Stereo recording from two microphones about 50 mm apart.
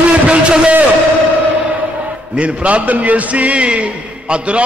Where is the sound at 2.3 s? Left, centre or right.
Right.